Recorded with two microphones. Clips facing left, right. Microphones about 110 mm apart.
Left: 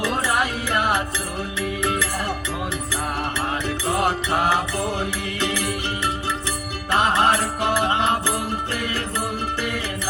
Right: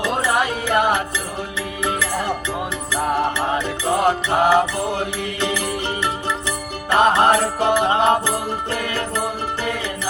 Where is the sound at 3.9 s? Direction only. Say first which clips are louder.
Right 4 dB; 20° right (ahead or behind).